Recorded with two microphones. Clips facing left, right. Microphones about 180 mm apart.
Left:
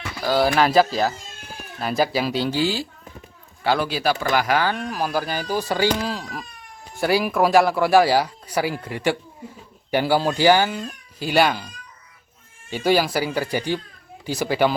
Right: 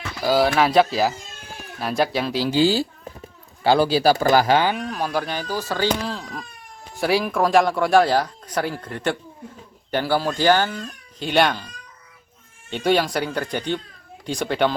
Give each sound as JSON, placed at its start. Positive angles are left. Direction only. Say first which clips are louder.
{"t": 0.2, "sound": "speech", "louder": "right 2 dB", "side_deg": -10}
{"t": 0.4, "sound": "speech", "louder": "left 2 dB", "side_deg": 0}
{"t": 3.6, "sound": "speech", "louder": "right 5 dB", "side_deg": -30}
{"t": 4.9, "sound": "speech", "louder": "even", "side_deg": 5}
{"t": 5.5, "sound": "speech", "louder": "left 3 dB", "side_deg": 15}
{"t": 12.7, "sound": "speech", "louder": "even", "side_deg": 5}